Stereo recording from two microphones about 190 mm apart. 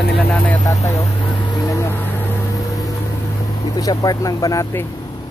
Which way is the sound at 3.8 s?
20° left (ahead or behind).